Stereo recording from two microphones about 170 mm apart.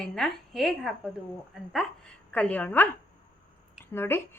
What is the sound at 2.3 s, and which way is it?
Speech, 10° left (ahead or behind).